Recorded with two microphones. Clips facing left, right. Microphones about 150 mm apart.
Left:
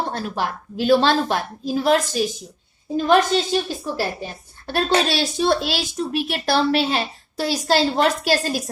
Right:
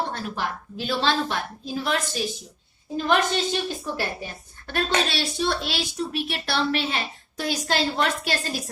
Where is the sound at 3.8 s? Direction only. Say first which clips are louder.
Left 4 dB; 35° left (ahead or behind).